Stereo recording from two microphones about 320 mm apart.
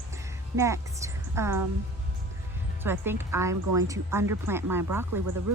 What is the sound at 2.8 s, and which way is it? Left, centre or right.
Speech, centre.